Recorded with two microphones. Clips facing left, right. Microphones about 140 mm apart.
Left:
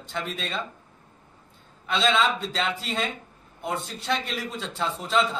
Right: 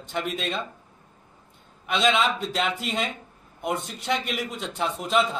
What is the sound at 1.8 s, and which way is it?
A man's voice, 15° right (ahead or behind).